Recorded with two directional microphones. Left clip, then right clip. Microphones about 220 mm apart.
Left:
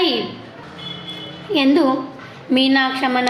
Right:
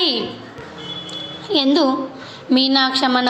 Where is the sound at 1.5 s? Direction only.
Centre (ahead or behind).